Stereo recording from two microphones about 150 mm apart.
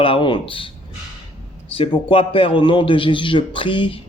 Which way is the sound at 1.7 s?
35° left (ahead or behind).